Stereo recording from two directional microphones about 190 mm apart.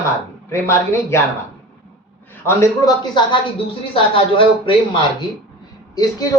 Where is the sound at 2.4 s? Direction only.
15° left (ahead or behind).